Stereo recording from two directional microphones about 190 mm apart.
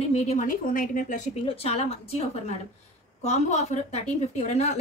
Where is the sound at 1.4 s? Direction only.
30° left (ahead or behind).